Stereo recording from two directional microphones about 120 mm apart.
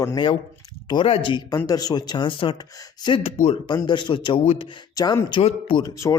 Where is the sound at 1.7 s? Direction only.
35° left (ahead or behind).